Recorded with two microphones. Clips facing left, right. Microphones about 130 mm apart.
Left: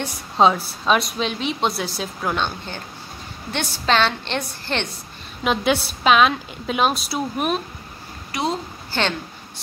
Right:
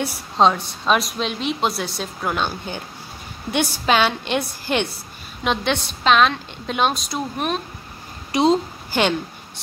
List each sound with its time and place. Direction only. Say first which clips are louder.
0.4 s a woman's voice: even; 5° left (ahead or behind)
5.4 s a woman's voice: left 2 dB; 5° left (ahead or behind)
8.3 s a woman's voice: right 7 dB; 20° right (ahead or behind)